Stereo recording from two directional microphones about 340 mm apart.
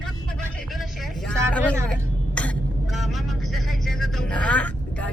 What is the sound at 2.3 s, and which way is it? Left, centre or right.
Vehicle, centre.